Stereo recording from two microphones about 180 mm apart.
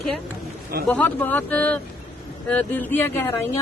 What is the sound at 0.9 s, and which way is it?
A woman's voice, 10° left (ahead or behind).